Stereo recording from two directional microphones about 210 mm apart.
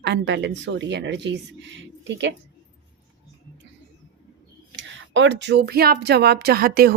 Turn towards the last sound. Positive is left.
turn(degrees=-45)  # may be behind; listen again after turning